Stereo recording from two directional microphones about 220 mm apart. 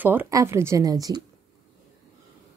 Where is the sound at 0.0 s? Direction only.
10° right (ahead or behind).